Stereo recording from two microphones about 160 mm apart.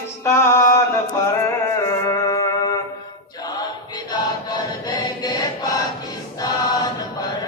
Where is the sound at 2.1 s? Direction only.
20° left (ahead or behind).